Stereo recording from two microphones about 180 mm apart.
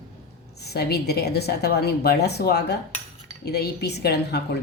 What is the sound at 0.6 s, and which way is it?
A woman's voice, 65° left (ahead or behind).